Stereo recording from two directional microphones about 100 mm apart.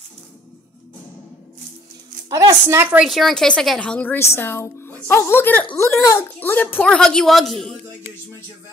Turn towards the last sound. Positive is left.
turn(degrees=0)  # may be behind; listen again after turning